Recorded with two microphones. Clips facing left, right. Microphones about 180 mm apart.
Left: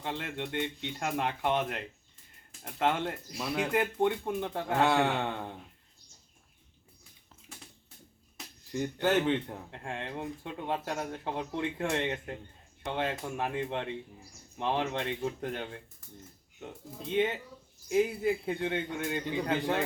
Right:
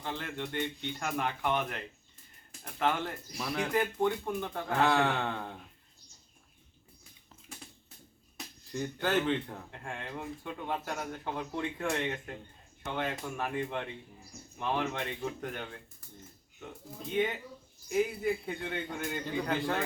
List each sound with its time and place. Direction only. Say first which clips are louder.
0.0 s speech: left 1 dB; 25° left (ahead or behind)
2.7 s speech: left 2 dB; 20° left (ahead or behind)
4.8 s speech: left 1 dB; 10° left (ahead or behind)
8.7 s speech: left 3 dB; 15° left (ahead or behind)
17.9 s speech: left 2 dB; 25° left (ahead or behind)